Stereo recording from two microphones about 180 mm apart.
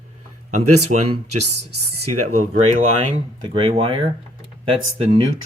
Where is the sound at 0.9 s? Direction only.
40° right (ahead or behind).